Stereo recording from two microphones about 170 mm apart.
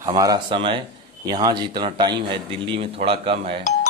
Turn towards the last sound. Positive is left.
turn(degrees=-35)  # may be behind; listen again after turning